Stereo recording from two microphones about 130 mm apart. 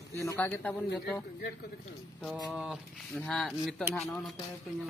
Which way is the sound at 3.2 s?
5° left (ahead or behind).